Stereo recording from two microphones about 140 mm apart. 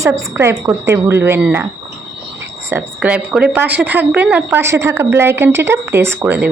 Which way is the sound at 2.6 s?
15° right (ahead or behind).